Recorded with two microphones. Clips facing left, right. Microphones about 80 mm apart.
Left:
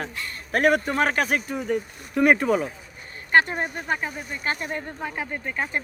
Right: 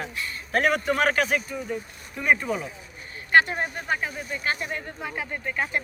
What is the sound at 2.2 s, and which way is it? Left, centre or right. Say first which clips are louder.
Speech: left 5 dB; left.